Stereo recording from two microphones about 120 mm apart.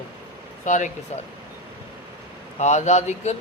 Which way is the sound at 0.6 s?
90° left.